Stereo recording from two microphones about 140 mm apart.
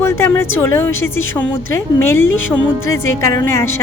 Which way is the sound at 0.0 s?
15° left (ahead or behind).